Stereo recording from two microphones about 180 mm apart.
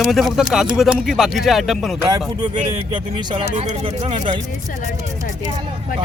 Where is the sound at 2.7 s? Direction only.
25° right (ahead or behind); by 4.2 s 40° right (ahead or behind).